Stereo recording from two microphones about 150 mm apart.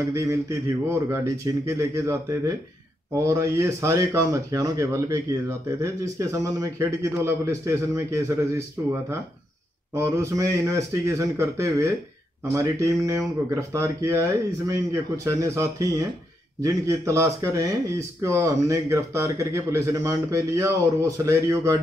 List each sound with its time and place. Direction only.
0.0 s speech: 20° right (ahead or behind)
9.9 s speech: 20° right (ahead or behind)